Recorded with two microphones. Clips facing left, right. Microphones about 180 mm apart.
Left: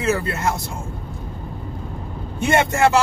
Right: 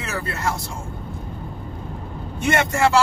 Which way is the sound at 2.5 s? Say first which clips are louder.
Left 2 dB; 25° left (ahead or behind).